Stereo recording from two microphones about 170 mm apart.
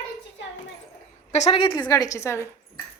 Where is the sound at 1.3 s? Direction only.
40° left (ahead or behind).